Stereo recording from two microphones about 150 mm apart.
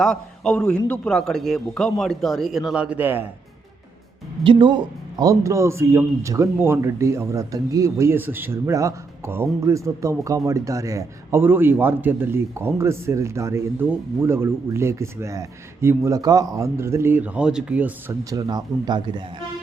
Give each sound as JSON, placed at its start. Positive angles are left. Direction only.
{"t": 0.0, "sound": "a man's voice", "side_deg": 5}
{"t": 4.4, "sound": "speech", "side_deg": -30}
{"t": 5.2, "sound": "a man's voice", "side_deg": -20}
{"t": 18.3, "sound": "speech", "side_deg": -25}